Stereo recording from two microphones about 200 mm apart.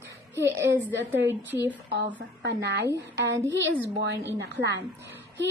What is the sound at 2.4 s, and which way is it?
A woman's voice, 55° right (ahead or behind).